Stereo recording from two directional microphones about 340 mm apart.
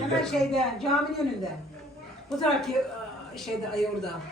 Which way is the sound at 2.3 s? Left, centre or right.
Centre.